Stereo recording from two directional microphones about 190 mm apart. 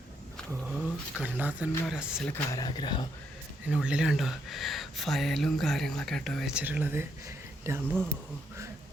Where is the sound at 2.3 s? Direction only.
20° left (ahead or behind).